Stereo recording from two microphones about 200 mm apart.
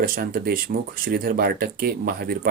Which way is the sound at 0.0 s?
45° right (ahead or behind).